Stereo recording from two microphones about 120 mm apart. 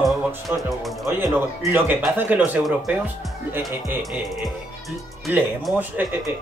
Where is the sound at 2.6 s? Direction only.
Centre (ahead or behind).